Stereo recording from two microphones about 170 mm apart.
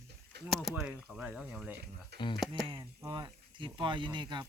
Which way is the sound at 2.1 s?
30° left (ahead or behind).